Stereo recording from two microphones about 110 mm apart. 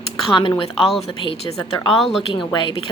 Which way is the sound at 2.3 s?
45° left (ahead or behind).